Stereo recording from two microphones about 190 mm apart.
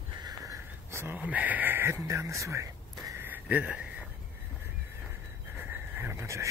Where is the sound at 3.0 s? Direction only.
10° right (ahead or behind).